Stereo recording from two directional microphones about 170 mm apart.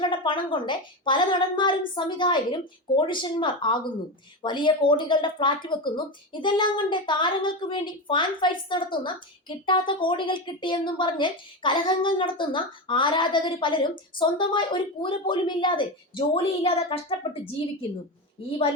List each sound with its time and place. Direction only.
0.0 s a woman's voice: 30° left (ahead or behind)